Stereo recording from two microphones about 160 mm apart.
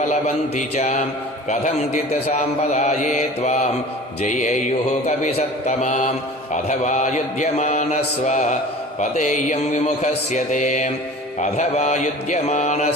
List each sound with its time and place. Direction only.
0.1 s a man's voice: 45° left (ahead or behind)